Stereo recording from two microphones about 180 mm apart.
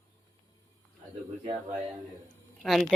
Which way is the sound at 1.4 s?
40° right (ahead or behind).